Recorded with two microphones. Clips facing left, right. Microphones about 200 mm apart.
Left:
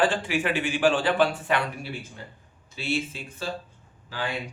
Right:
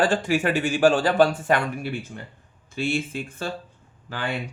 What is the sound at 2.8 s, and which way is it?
Speech, 50° right (ahead or behind).